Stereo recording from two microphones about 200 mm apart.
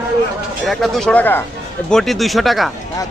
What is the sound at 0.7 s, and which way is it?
A man's voice, centre (ahead or behind).